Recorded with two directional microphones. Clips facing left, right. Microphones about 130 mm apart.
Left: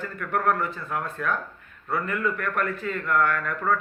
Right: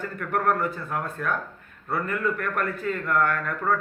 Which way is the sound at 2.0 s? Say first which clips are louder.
Right 2 dB; 40° right (ahead or behind).